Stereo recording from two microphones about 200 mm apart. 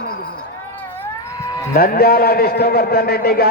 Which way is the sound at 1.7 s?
50° left (ahead or behind).